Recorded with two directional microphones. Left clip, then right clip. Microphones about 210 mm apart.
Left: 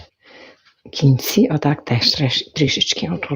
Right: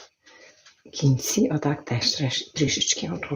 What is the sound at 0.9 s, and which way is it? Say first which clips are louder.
Speech: left 6 dB; 40° left (ahead or behind).